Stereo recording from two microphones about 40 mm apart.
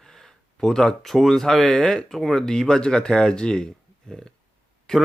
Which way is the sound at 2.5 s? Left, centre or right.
Centre.